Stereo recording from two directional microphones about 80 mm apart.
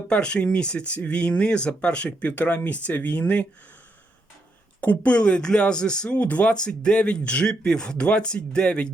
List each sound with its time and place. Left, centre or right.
0.1 s a man's voice: centre
4.8 s a man's voice: centre